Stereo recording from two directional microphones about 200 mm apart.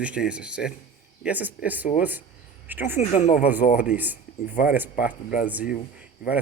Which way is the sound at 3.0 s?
40° left (ahead or behind).